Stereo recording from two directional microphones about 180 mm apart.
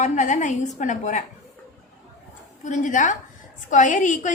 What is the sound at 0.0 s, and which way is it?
A woman's voice, 45° left (ahead or behind).